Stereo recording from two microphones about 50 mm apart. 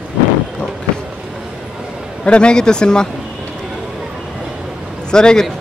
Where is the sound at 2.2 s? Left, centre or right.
Centre.